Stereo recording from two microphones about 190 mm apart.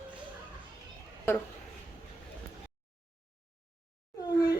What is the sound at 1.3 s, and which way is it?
Speech, 10° left (ahead or behind).